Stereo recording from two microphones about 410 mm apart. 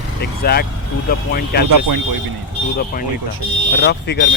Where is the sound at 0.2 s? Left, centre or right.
Left.